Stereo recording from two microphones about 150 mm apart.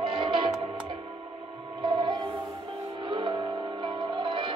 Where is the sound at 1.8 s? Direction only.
30° right (ahead or behind).